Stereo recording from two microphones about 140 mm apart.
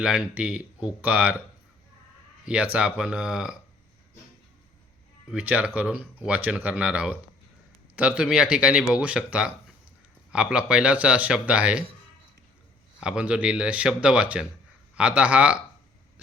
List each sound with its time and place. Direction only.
0.0 s speech: 5° right (ahead or behind)
2.7 s speech: 10° right (ahead or behind)
5.3 s speech: 10° right (ahead or behind)
13.0 s speech: 5° right (ahead or behind)